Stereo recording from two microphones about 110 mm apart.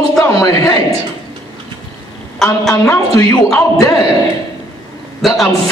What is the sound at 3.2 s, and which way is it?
Speech, 20° left (ahead or behind).